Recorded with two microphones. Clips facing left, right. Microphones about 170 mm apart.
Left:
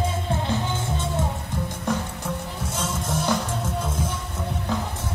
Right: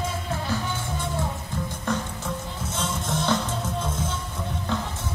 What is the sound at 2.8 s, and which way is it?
Music, 5° left (ahead or behind).